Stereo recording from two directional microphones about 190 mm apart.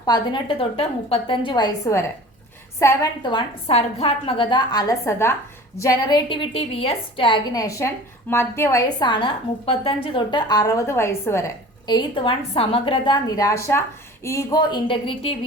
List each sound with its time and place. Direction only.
0.0 s a woman's voice: 25° left (ahead or behind)